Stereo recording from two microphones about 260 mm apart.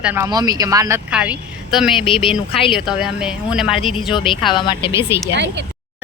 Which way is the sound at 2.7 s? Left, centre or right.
Centre.